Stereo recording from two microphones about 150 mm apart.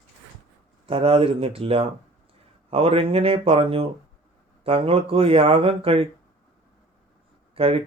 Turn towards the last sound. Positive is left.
turn(degrees=-40)  # may be behind; listen again after turning